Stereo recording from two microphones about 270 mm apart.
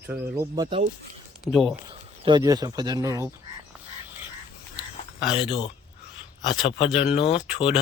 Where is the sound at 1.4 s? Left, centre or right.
Centre.